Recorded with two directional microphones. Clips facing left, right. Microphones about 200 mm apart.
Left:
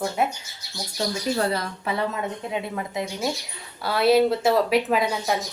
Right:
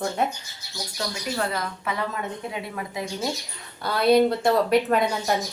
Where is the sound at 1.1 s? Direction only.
35° left (ahead or behind).